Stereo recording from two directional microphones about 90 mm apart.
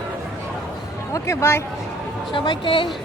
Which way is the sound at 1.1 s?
30° left (ahead or behind).